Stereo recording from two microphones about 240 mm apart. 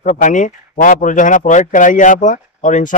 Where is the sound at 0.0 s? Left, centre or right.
Left.